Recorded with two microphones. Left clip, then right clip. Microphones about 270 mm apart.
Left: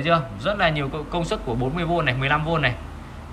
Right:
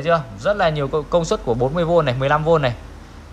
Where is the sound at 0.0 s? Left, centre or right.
Centre.